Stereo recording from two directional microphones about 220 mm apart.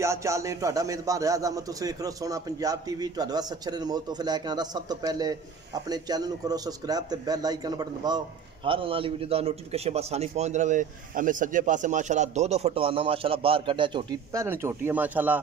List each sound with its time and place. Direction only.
0.0 s a man's voice: 15° right (ahead or behind)